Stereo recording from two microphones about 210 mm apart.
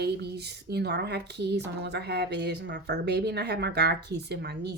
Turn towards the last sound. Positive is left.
turn(degrees=-50)  # may be behind; listen again after turning